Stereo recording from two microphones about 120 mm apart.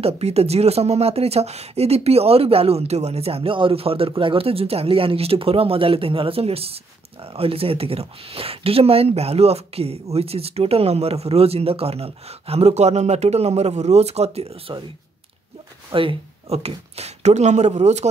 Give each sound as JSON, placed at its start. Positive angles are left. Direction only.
{"t": 0.0, "sound": "speech", "side_deg": -60}
{"t": 15.9, "sound": "speech", "side_deg": -45}